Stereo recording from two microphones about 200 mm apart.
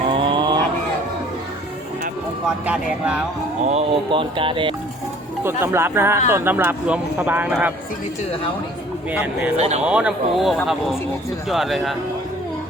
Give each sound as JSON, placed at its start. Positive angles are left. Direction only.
{"t": 0.1, "sound": "a sound", "side_deg": -25}
{"t": 3.7, "sound": "speech", "side_deg": -30}
{"t": 5.4, "sound": "speech", "side_deg": -10}
{"t": 9.6, "sound": "speech", "side_deg": -35}
{"t": 9.8, "sound": "speech", "side_deg": -5}